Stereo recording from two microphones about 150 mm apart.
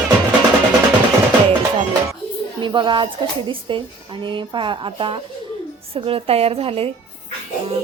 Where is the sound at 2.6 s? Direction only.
35° right (ahead or behind).